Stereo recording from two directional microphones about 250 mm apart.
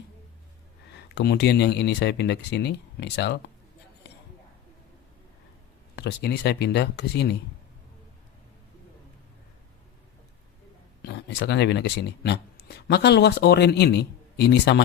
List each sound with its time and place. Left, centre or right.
1.1 s speech: left
6.0 s speech: left
11.0 s speech: left